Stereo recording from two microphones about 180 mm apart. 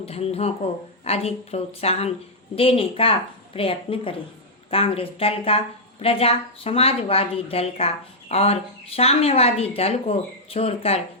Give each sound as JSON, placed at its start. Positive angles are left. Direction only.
{"t": 0.0, "sound": "a woman's voice", "side_deg": 35}